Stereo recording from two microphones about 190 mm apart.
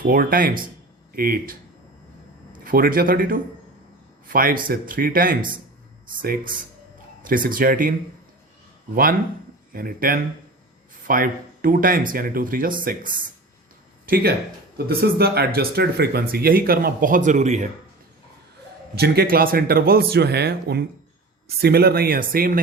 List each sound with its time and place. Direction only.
0.0 s speech: 50° right (ahead or behind)
2.6 s speech: 50° right (ahead or behind)
9.7 s speech: 50° right (ahead or behind)
14.8 s speech: 55° right (ahead or behind)
18.9 s speech: 60° right (ahead or behind)